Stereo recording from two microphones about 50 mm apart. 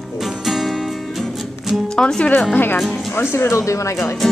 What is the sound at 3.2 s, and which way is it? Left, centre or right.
Speech, left.